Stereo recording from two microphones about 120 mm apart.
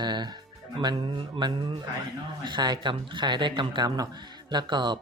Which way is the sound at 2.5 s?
40° right (ahead or behind).